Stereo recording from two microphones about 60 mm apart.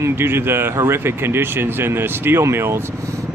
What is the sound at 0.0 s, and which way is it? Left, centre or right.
Speech, right.